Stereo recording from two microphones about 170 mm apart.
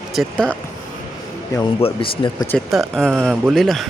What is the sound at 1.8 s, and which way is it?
Speech, 30° left (ahead or behind).